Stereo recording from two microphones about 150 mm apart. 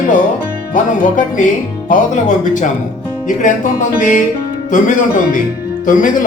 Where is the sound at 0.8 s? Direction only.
60° left (ahead or behind).